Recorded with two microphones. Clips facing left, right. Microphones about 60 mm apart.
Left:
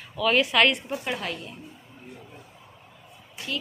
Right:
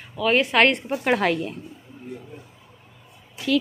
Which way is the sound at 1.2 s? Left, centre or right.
Right.